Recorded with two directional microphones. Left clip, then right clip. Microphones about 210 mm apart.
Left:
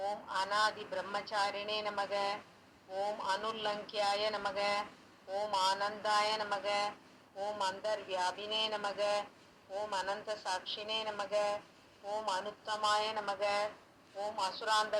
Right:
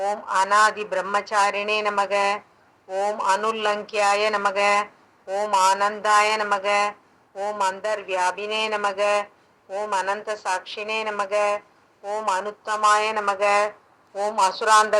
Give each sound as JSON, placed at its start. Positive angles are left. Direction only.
{"t": 0.0, "sound": "speech", "side_deg": -45}